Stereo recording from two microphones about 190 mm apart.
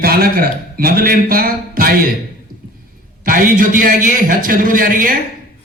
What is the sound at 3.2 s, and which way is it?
A man's voice, 45° right (ahead or behind).